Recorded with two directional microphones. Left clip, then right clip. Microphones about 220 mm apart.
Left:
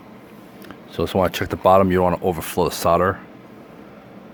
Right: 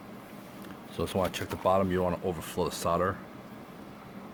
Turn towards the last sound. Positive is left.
turn(degrees=40)  # may be behind; listen again after turning